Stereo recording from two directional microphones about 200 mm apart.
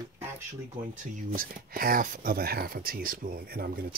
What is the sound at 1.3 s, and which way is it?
Speech, 45° right (ahead or behind).